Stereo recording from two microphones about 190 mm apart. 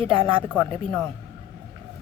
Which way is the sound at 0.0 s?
30° right (ahead or behind).